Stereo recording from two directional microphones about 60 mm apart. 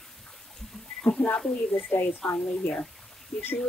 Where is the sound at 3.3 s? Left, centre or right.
Centre.